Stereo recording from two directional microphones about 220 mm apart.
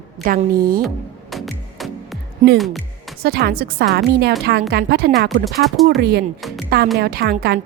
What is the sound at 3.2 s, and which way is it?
Speech, 45° right (ahead or behind).